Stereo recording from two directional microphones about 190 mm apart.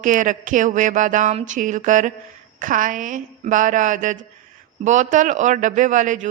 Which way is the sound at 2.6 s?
45° right (ahead or behind).